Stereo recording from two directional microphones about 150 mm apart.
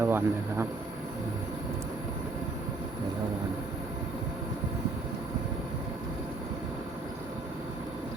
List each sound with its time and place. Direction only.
0.0 s speech: 15° right (ahead or behind)